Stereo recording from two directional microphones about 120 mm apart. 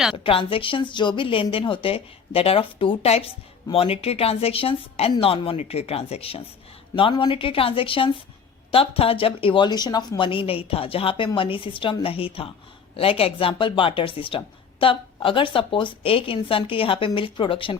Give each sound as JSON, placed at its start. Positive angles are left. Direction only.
{"t": 0.2, "sound": "speech", "side_deg": 50}